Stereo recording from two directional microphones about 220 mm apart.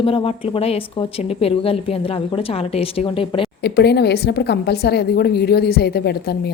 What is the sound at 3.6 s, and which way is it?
A woman's voice, 50° left (ahead or behind).